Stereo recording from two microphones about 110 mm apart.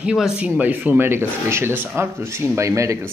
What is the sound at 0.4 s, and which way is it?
Speech, 15° right (ahead or behind).